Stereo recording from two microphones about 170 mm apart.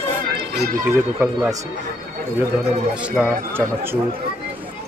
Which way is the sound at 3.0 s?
5° right (ahead or behind).